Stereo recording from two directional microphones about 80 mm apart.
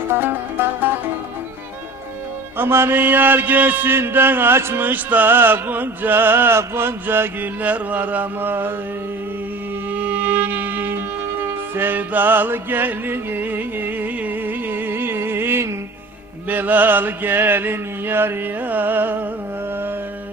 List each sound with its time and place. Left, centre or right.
0.1 s music: right
2.6 s mantra: right
9.9 s music: centre
16.5 s mantra: right